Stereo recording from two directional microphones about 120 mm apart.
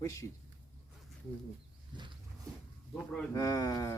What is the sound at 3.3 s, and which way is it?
Speech, 30° left (ahead or behind).